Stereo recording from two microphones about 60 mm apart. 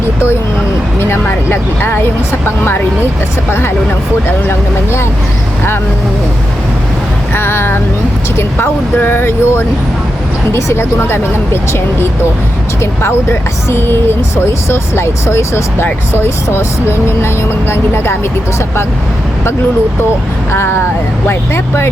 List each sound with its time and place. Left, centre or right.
0.9 s speech: left
4.3 s speech: left
7.3 s speech: left
16.1 s speech: left
20.5 s speech: left